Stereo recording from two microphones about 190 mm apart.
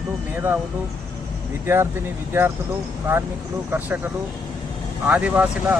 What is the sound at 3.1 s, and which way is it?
Speech, 10° right (ahead or behind).